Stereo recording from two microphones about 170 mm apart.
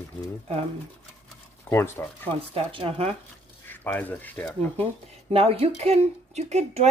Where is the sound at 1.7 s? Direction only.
15° left (ahead or behind).